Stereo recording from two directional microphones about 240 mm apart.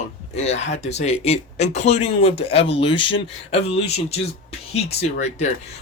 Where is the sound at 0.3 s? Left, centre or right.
Left.